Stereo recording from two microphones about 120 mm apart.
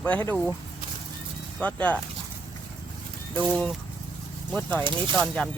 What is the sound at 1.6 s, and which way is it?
Speech, 10° left (ahead or behind).